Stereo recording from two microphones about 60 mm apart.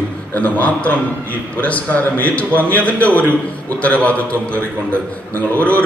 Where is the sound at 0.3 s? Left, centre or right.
Left.